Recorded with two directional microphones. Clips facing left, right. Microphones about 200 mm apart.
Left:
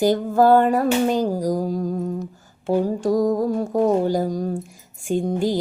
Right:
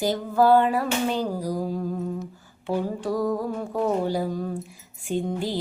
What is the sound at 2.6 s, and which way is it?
Speech, 45° left (ahead or behind).